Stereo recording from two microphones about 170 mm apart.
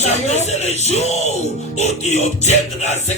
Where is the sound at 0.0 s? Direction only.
40° left (ahead or behind).